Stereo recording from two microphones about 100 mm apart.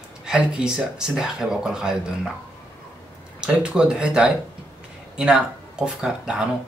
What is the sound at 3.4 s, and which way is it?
Speech, 10° right (ahead or behind).